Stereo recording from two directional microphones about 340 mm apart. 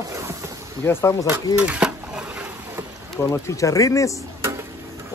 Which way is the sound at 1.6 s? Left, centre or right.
Centre.